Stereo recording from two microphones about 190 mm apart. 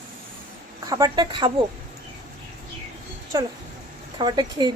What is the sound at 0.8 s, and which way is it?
Speech, 20° right (ahead or behind).